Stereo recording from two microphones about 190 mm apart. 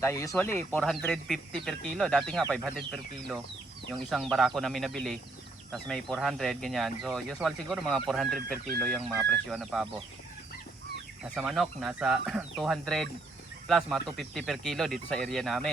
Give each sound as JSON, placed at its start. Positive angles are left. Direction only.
{"t": 0.0, "sound": "speech", "side_deg": 15}
{"t": 11.3, "sound": "speech", "side_deg": 0}